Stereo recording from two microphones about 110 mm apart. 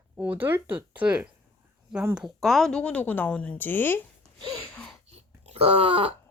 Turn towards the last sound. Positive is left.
turn(degrees=-60)  # may be behind; listen again after turning